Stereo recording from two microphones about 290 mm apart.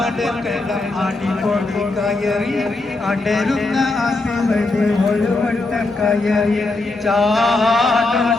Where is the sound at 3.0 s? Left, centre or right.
Centre.